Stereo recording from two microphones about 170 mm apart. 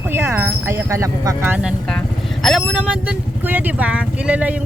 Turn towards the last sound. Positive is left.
turn(degrees=-10)  # may be behind; listen again after turning